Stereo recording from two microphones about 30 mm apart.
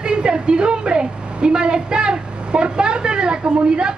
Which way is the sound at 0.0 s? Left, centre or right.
Right.